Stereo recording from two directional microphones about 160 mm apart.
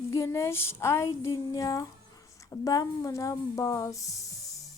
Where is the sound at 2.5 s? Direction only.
20° left (ahead or behind).